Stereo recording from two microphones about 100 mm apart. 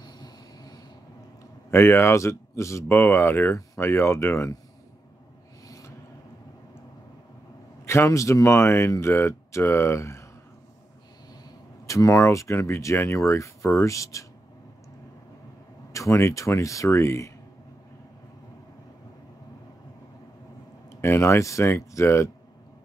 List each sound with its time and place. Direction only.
0.0 s train: 40° left (ahead or behind)
1.7 s speech: 25° left (ahead or behind)
5.7 s a sound: 35° left (ahead or behind)
7.8 s speech: 30° left (ahead or behind)
11.8 s speech: 35° left (ahead or behind)
15.9 s speech: 30° left (ahead or behind)
20.9 s speech: 25° left (ahead or behind)